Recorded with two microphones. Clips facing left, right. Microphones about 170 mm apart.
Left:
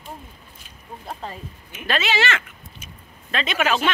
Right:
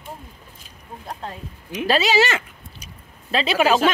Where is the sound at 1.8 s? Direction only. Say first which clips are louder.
Right 4 dB; 35° right (ahead or behind).